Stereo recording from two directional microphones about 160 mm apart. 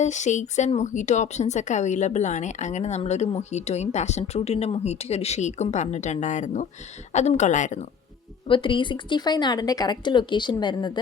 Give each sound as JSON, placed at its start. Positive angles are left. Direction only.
{"t": 0.0, "sound": "speech", "side_deg": 50}
{"t": 8.4, "sound": "speech", "side_deg": 30}